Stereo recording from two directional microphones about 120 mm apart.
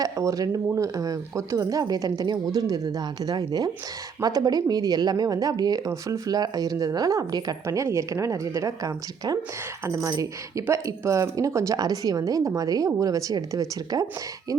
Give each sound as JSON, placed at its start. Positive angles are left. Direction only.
{"t": 0.0, "sound": "speech", "side_deg": -30}